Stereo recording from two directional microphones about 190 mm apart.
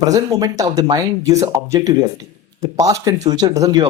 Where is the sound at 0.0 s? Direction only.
20° right (ahead or behind).